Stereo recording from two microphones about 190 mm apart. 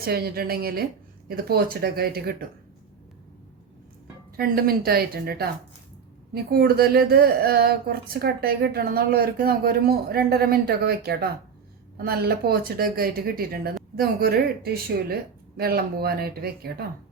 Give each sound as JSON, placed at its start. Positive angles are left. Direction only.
{"t": 0.0, "sound": "speech", "side_deg": -55}
{"t": 4.4, "sound": "speech", "side_deg": -50}